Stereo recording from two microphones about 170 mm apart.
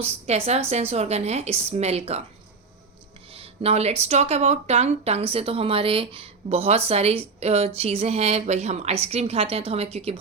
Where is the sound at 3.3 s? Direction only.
35° right (ahead or behind).